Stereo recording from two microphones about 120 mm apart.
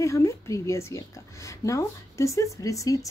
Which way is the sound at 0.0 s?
25° left (ahead or behind).